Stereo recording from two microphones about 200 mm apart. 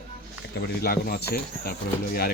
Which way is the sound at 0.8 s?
50° left (ahead or behind).